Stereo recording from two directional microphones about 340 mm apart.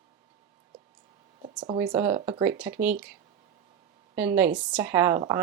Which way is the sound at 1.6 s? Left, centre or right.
Centre.